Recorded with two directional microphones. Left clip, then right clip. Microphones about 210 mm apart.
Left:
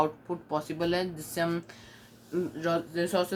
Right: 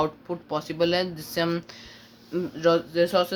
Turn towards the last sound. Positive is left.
turn(degrees=-35)  # may be behind; listen again after turning